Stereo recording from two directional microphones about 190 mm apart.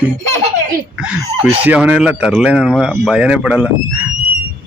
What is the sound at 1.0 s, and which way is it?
A woman's voice, 5° right (ahead or behind).